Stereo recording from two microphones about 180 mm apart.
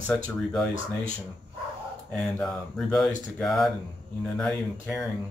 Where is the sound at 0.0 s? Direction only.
5° left (ahead or behind).